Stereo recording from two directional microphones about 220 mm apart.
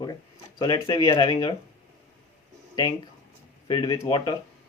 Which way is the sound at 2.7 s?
20° left (ahead or behind).